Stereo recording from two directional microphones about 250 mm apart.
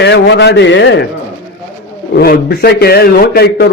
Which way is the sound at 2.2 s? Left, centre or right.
Left.